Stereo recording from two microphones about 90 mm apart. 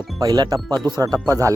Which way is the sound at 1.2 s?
35° right (ahead or behind).